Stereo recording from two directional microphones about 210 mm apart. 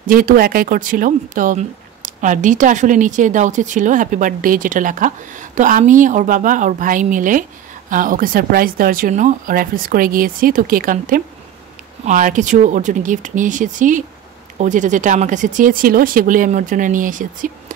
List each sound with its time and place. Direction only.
0.0 s speech: 40° right (ahead or behind)